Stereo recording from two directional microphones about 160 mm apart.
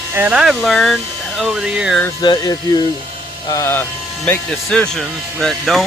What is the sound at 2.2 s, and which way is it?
Speech, 25° left (ahead or behind).